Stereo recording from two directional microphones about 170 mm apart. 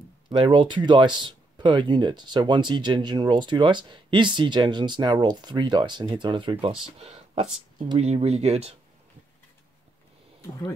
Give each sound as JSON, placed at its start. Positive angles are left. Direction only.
{"t": 0.3, "sound": "speech", "side_deg": -25}